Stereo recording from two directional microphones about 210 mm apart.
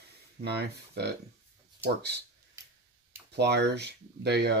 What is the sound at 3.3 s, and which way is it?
Speech, 55° right (ahead or behind).